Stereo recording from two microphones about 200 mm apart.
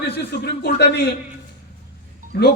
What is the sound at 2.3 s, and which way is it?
Speech, 55° left (ahead or behind).